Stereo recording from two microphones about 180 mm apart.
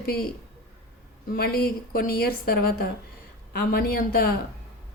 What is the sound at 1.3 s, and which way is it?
Speech, 55° left (ahead or behind).